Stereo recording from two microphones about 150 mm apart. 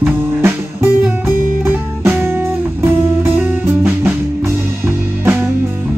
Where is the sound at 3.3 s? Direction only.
15° right (ahead or behind).